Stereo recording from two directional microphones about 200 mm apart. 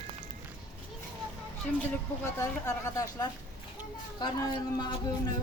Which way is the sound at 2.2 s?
15° left (ahead or behind).